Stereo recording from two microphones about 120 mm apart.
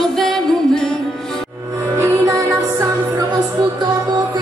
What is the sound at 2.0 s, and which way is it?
Music, 30° right (ahead or behind).